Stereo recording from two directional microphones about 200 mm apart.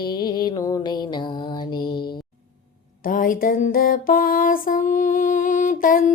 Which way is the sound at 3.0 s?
40° left (ahead or behind).